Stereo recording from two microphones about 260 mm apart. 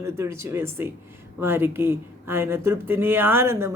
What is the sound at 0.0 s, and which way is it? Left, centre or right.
Speech, centre.